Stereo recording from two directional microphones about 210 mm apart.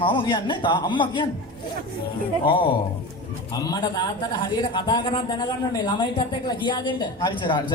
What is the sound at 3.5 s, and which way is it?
A man's voice, 15° left (ahead or behind).